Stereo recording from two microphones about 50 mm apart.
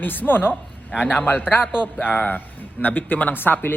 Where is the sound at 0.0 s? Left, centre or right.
Left.